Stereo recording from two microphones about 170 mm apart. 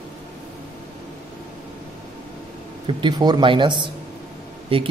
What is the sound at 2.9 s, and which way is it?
Speech, 25° right (ahead or behind).